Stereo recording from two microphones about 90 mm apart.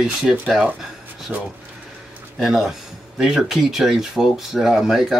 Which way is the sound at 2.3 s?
5° right (ahead or behind).